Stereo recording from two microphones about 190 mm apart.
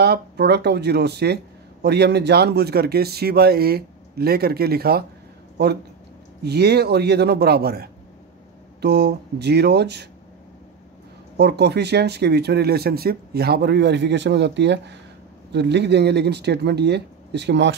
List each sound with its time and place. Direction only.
0.0 s speech: 60° right (ahead or behind)
6.4 s speech: 60° right (ahead or behind)
11.3 s speech: 60° right (ahead or behind)